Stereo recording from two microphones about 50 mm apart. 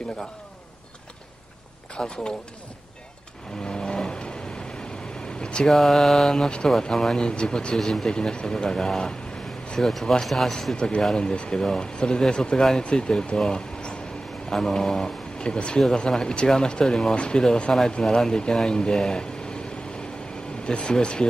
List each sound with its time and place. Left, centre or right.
2.0 s speech: centre
3.6 s vehicle: centre
5.4 s vehicle: centre
5.7 s speech: centre
6.3 s speech: centre
7.2 s speech: centre
11.1 s speech: centre
11.6 s speech: centre
13.4 s a sound: centre
14.5 s speech: centre
15.3 s speech: centre
17.1 s speech: centre
20.6 s speech: centre